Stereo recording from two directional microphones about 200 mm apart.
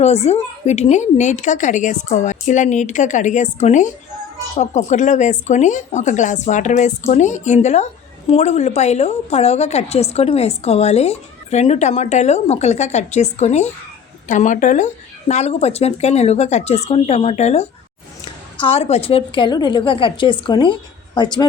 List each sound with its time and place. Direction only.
0.0 s a woman's voice: 30° left (ahead or behind)